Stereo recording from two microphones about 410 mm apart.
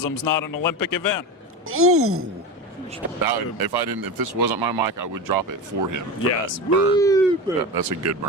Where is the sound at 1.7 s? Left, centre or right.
Right.